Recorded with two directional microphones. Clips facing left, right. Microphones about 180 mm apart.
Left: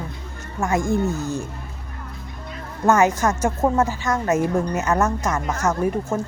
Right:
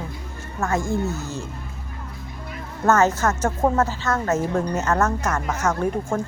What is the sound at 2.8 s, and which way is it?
Speech, 15° left (ahead or behind).